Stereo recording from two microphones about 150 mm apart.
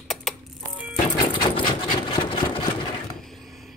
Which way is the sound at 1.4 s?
35° left (ahead or behind).